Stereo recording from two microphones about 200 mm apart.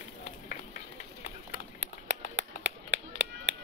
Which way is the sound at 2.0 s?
60° right (ahead or behind).